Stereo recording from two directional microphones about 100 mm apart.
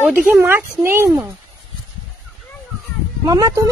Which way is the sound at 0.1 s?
5° right (ahead or behind).